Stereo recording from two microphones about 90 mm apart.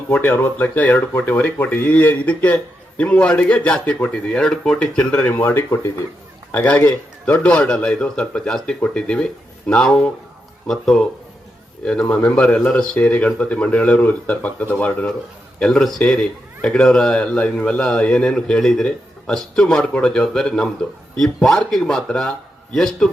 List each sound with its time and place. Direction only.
0.1 s a man's voice: 20° left (ahead or behind)
15.5 s a man's voice: 5° left (ahead or behind)